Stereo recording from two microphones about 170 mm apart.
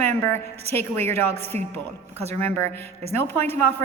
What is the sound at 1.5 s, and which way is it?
Speech, 40° right (ahead or behind).